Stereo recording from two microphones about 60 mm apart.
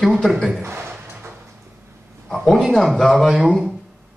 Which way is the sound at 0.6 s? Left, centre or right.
Right.